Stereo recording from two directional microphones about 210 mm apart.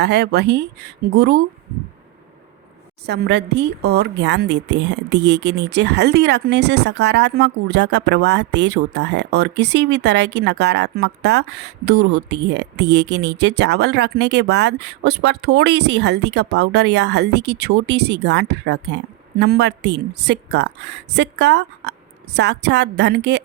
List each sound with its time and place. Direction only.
0.0 s a woman's voice: 55° right (ahead or behind)
3.1 s a woman's voice: 55° right (ahead or behind)